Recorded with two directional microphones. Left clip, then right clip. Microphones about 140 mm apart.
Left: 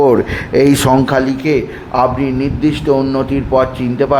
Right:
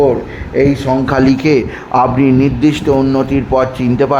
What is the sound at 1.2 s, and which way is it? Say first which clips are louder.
Speech: right 4 dB; 40° right (ahead or behind).